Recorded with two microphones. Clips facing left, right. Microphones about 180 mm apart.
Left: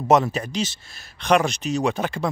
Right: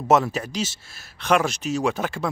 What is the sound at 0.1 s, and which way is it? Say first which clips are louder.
Speech: left 1 dB; 5° right (ahead or behind).